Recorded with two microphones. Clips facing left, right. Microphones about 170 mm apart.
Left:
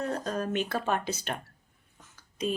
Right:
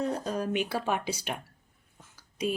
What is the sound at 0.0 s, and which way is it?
Speech, 10° right (ahead or behind).